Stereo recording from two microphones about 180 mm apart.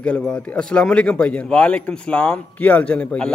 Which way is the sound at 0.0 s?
5° left (ahead or behind).